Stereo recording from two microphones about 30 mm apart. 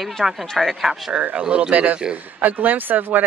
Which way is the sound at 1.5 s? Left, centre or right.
Right.